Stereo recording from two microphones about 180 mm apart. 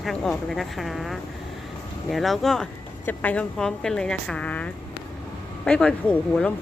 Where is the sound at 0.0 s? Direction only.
5° left (ahead or behind).